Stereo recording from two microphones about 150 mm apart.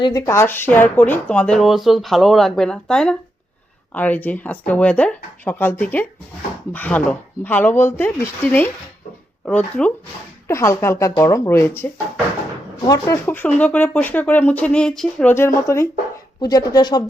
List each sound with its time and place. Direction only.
0.0 s speech: 25° left (ahead or behind)
12.9 s speech: 15° left (ahead or behind)